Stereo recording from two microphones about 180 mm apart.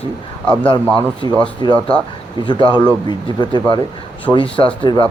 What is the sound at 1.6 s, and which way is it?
Speech, 25° left (ahead or behind).